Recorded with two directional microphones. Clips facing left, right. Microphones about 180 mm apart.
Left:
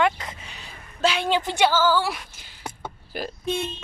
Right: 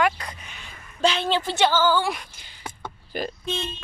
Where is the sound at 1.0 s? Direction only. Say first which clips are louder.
Even; 10° left (ahead or behind).